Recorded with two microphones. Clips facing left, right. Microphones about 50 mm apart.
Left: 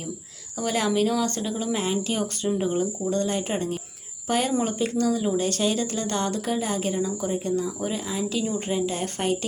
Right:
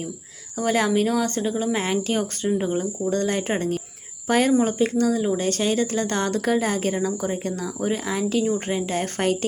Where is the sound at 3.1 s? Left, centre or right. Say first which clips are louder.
Right 5 dB; right.